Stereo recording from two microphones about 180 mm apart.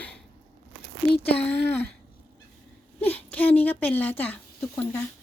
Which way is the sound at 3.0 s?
10° left (ahead or behind).